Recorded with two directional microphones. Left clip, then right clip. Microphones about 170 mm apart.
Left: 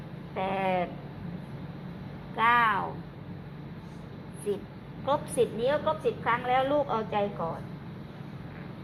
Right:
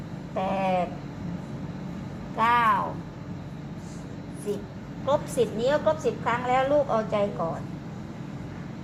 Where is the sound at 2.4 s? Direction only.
25° left (ahead or behind).